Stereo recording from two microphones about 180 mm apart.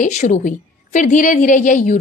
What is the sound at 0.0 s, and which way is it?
A woman's voice, 40° left (ahead or behind).